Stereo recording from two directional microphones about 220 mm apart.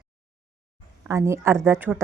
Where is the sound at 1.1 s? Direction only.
15° right (ahead or behind).